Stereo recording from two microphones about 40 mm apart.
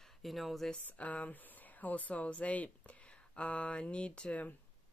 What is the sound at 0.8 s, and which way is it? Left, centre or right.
Speech, left.